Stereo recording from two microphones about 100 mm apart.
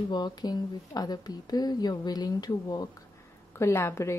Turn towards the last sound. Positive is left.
turn(degrees=30)  # may be behind; listen again after turning